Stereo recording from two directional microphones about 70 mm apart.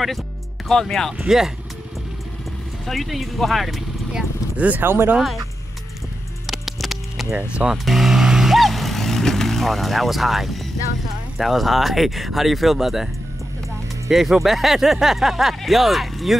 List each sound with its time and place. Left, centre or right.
0.7 s speech: centre
1.1 s speech: centre
2.9 s speech: centre
4.6 s speech: right
6.4 s a sound: centre
7.3 s speech: centre
7.7 s vehicle: centre
11.3 s speech: centre